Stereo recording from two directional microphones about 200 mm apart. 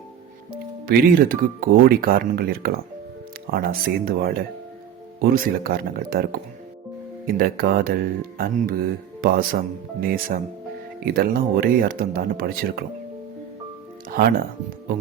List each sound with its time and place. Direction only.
0.5 s speech: 45° right (ahead or behind)
7.3 s speech: 45° right (ahead or behind)
14.1 s speech: 50° right (ahead or behind)